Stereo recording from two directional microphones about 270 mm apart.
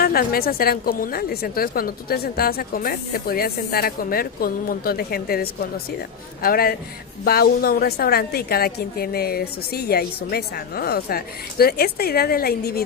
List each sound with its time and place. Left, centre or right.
0.0 s a woman's voice: left